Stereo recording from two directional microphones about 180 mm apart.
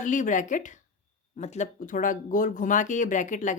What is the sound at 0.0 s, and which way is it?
Speech, 45° left (ahead or behind).